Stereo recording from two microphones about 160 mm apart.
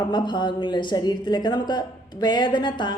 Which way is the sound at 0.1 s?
30° left (ahead or behind).